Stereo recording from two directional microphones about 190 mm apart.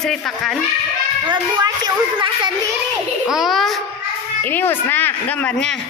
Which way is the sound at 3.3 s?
Centre (ahead or behind).